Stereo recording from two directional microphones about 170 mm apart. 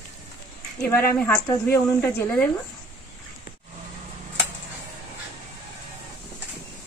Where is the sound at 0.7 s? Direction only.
10° left (ahead or behind).